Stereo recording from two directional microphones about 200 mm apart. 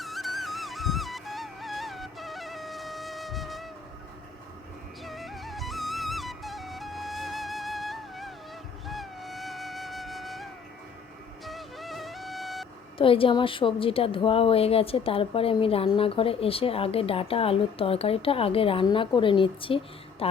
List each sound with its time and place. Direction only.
0.0 s music: centre (ahead or behind)
5.0 s music: centre (ahead or behind)
8.9 s flute: centre (ahead or behind)
11.4 s music: centre (ahead or behind)
13.0 s a woman's voice: 25° left (ahead or behind)